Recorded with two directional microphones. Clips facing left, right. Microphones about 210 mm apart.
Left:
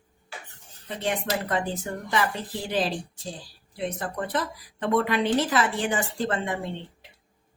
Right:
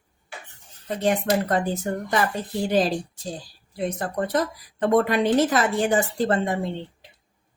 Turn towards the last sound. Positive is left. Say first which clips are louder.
# right 5 dB
turn(degrees=-40)  # may be behind; listen again after turning